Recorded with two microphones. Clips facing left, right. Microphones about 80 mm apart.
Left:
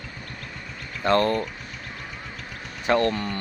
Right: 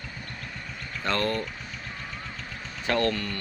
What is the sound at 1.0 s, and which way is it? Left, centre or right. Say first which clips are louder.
Vehicle: left 7 dB; centre.